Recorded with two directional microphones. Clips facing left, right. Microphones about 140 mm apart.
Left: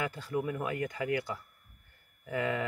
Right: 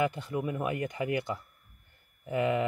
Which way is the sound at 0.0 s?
20° right (ahead or behind).